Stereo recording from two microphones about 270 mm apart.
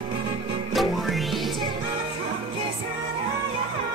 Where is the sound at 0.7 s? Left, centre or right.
Centre.